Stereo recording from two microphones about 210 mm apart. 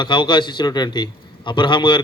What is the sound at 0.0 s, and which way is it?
Speech, 20° left (ahead or behind).